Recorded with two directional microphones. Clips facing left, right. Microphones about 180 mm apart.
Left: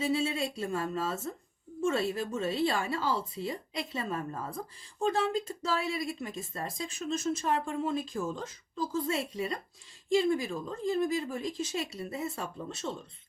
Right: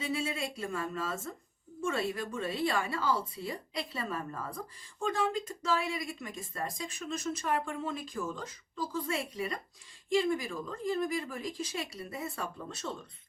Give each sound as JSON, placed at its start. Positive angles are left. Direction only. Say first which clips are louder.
{"t": 0.0, "sound": "speech", "louder": "left 5 dB", "side_deg": 25}